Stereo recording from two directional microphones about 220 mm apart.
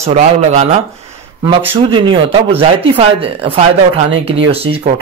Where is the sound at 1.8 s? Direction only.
25° right (ahead or behind).